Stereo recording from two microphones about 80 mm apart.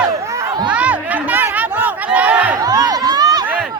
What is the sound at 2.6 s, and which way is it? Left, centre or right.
Crowd, right.